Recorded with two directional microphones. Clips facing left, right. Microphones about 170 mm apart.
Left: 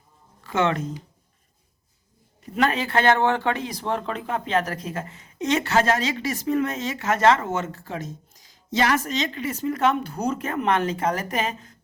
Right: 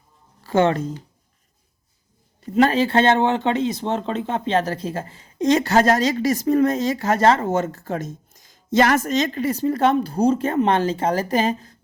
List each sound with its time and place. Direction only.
0.4 s speech: 35° right (ahead or behind)
2.4 s speech: 30° right (ahead or behind)